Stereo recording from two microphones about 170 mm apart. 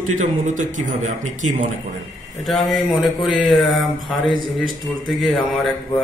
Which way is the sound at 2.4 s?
Centre (ahead or behind).